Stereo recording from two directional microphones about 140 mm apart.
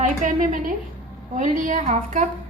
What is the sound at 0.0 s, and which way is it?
A woman's voice, 65° right (ahead or behind).